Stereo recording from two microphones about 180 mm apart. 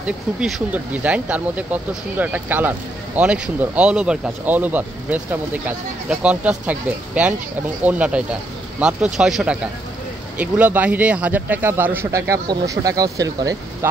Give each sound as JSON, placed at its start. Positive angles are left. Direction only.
{"t": 0.0, "sound": "speech", "side_deg": -5}